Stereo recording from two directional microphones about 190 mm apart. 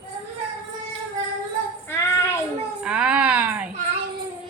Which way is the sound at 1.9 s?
15° left (ahead or behind).